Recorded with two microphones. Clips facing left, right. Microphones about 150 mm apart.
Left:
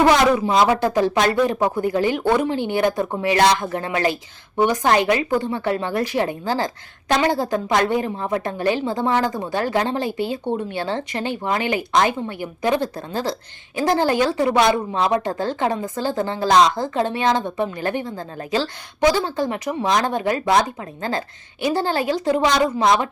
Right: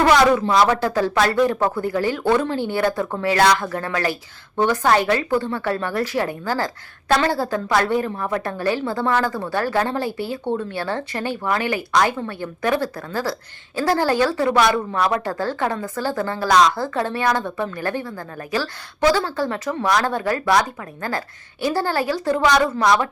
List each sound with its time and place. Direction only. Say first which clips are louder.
0.3 s a woman's voice: even; 15° left (ahead or behind)